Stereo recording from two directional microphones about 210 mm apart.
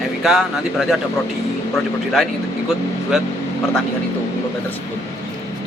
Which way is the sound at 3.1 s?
Centre (ahead or behind).